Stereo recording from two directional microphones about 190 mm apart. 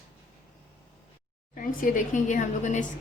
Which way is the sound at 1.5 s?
45° left (ahead or behind).